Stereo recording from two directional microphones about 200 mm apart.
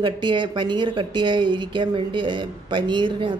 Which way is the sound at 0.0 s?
25° right (ahead or behind).